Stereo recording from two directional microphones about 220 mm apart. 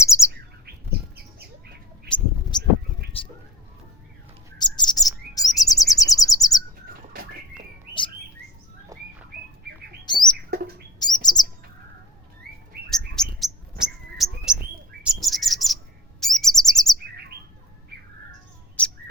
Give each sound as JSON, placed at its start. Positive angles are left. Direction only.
{"t": 0.0, "sound": "bird", "side_deg": 15}
{"t": 0.6, "sound": "a sound", "side_deg": -45}
{"t": 2.5, "sound": "a sound", "side_deg": 20}
{"t": 4.5, "sound": "chirp", "side_deg": 20}
{"t": 7.9, "sound": "bird", "side_deg": -45}
{"t": 8.9, "sound": "bird", "side_deg": -15}
{"t": 10.1, "sound": "bird", "side_deg": 20}
{"t": 12.9, "sound": "bird", "side_deg": 0}
{"t": 16.2, "sound": "chirp", "side_deg": 0}
{"t": 18.8, "sound": "bird", "side_deg": 5}